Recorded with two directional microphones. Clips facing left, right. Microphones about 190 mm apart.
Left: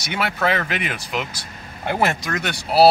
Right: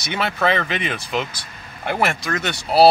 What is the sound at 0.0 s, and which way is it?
Speech, 10° left (ahead or behind).